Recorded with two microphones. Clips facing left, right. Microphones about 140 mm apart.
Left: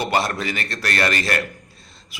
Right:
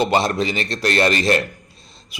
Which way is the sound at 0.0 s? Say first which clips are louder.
Right 4 dB; 20° right (ahead or behind).